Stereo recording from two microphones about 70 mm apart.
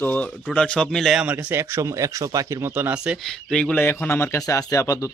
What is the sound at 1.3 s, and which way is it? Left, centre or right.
Speech, right.